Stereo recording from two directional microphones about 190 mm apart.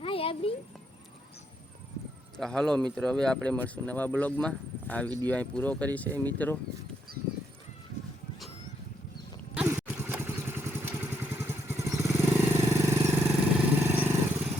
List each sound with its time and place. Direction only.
0.0 s a sound: 30° left (ahead or behind)
2.4 s speech: 5° left (ahead or behind)
9.6 s vehicle: 10° right (ahead or behind)